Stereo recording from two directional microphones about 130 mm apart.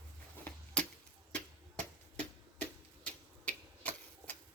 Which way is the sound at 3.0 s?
10° left (ahead or behind).